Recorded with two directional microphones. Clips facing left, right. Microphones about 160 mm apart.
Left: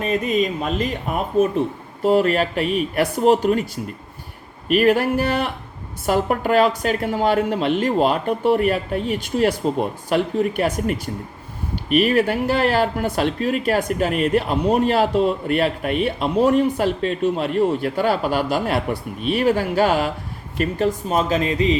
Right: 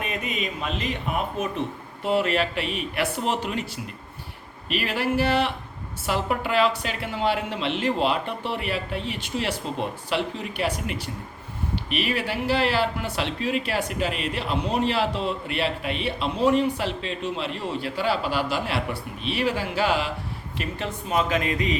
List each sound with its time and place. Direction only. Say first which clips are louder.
0.0 s speech: left 10 dB; 35° left (ahead or behind)
2.0 s speech: left 6 dB; 40° left (ahead or behind)
4.7 s speech: left 9 dB; 50° left (ahead or behind); by 21.8 s 30° left (ahead or behind)